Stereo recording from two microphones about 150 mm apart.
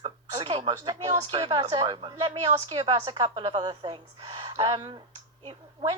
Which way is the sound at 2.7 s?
30° right (ahead or behind).